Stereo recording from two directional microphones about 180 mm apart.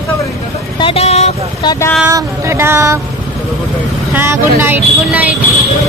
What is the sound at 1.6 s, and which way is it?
Speech, 25° left (ahead or behind).